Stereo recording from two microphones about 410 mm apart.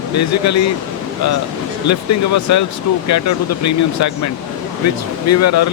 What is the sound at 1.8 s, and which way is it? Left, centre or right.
Speech, left.